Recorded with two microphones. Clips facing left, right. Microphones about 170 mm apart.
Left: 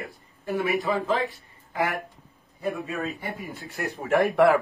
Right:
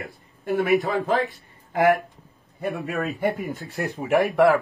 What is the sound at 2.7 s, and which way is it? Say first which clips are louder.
Speech: right 5 dB; 65° right (ahead or behind).